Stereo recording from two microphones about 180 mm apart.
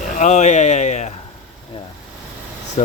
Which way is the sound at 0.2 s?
40° left (ahead or behind).